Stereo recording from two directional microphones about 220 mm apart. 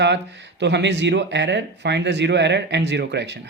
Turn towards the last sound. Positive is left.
turn(degrees=-50)  # may be behind; listen again after turning